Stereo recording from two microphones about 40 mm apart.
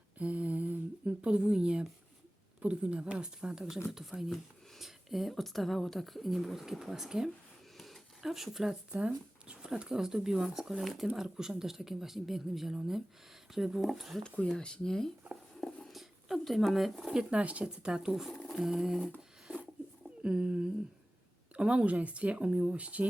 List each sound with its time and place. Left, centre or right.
0.2 s humming: right
1.2 s speech: right
7.8 s a sound: centre
8.9 s speech: right; by 14.2 s centre
14.3 s speech: left
15.9 s a sound: centre
16.4 s speech: centre
17.3 s speech: right
17.7 s speech: centre
20.2 s speech: right